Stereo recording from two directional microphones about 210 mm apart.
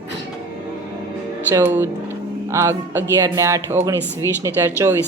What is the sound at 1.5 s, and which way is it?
Speech, 10° right (ahead or behind).